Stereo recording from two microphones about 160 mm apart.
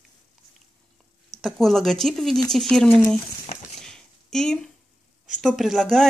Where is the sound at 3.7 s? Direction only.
5° left (ahead or behind).